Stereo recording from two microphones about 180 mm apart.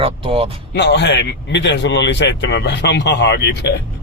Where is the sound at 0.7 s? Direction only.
70° left (ahead or behind).